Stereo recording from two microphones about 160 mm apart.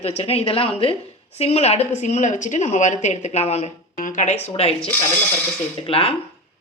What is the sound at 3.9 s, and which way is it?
A woman's voice, 55° left (ahead or behind).